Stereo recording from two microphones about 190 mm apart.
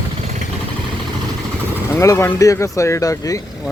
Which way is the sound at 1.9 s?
15° left (ahead or behind).